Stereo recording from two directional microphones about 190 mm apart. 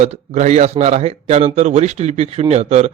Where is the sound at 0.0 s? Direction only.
35° right (ahead or behind).